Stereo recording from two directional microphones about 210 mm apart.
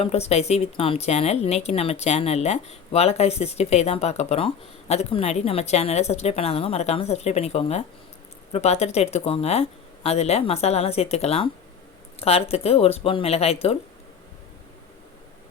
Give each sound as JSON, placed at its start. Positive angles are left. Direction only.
{"t": 0.0, "sound": "a woman's voice", "side_deg": 30}